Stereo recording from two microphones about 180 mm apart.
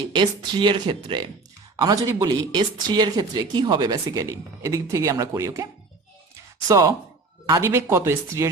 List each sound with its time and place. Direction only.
0.1 s speech: 25° right (ahead or behind)
6.7 s speech: 20° right (ahead or behind)